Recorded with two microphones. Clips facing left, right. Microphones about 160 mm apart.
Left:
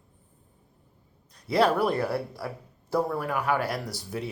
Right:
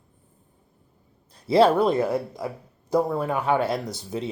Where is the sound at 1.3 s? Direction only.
25° right (ahead or behind).